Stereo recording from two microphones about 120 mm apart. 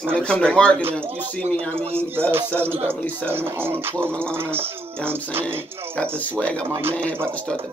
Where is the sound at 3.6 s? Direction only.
20° right (ahead or behind).